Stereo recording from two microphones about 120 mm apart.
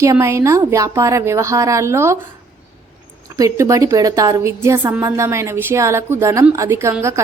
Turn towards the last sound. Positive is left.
turn(degrees=-25)  # may be behind; listen again after turning